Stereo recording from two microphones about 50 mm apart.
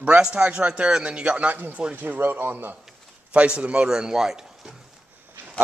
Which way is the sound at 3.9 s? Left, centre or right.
Centre.